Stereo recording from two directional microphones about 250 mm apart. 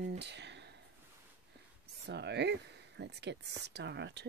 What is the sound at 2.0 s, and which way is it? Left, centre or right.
Speech, right.